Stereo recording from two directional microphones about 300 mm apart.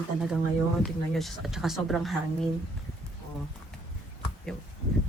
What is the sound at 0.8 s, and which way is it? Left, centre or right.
Speech, centre.